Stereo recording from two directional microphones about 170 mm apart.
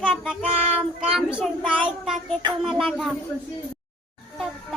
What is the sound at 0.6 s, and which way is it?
Child singing, 35° right (ahead or behind).